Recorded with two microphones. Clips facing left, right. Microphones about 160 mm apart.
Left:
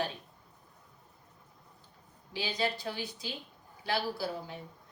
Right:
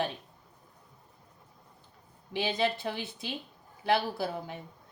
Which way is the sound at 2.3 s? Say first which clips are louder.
Right 4 dB; 55° right (ahead or behind).